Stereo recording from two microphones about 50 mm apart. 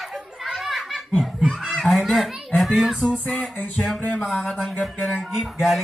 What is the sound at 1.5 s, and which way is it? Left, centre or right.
A child's voice, centre.